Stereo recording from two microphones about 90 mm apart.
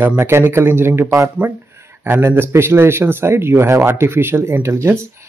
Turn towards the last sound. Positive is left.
turn(degrees=-30)  # may be behind; listen again after turning